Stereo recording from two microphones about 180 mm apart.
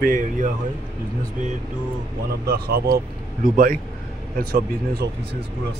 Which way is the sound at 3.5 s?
50° right (ahead or behind).